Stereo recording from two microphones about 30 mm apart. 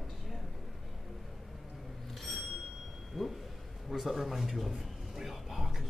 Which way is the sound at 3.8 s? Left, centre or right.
Centre.